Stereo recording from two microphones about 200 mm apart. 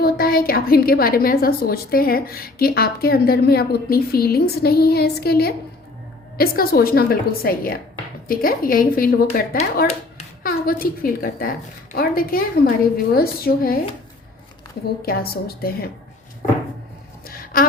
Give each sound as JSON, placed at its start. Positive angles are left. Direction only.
{"t": 0.0, "sound": "a woman's voice", "side_deg": 50}
{"t": 15.0, "sound": "a woman's voice", "side_deg": 50}
{"t": 17.2, "sound": "a sound", "side_deg": 45}